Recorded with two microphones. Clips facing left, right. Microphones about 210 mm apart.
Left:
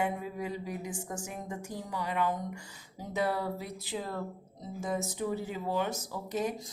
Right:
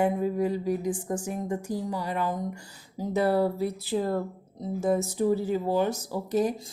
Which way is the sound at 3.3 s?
35° right (ahead or behind).